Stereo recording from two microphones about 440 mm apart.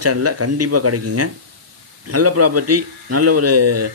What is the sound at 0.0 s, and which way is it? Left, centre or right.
Speech, right.